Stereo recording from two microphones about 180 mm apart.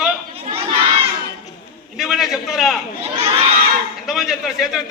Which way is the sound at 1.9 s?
Centre (ahead or behind).